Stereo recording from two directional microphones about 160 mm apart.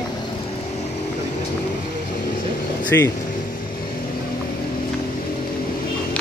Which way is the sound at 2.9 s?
15° left (ahead or behind).